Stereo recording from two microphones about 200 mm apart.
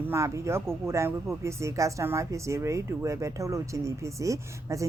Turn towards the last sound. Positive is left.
turn(degrees=-15)  # may be behind; listen again after turning